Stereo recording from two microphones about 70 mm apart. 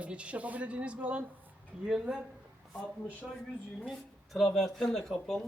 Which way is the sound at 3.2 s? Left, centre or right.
Centre.